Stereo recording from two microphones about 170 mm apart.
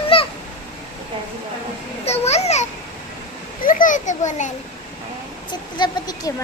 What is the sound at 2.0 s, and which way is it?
Babbling, 40° left (ahead or behind).